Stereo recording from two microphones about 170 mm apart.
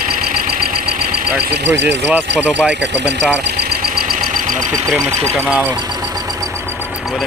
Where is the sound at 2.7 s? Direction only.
90° right.